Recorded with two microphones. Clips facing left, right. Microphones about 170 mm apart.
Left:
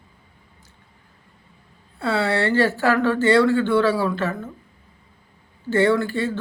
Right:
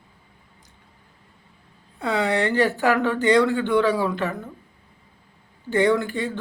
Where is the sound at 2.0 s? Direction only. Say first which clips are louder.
Left 1 dB; 15° right (ahead or behind).